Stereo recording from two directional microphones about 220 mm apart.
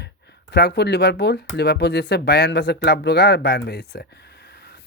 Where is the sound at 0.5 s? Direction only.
50° left (ahead or behind).